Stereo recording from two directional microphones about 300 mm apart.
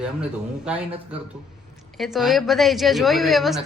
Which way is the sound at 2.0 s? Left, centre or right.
Centre.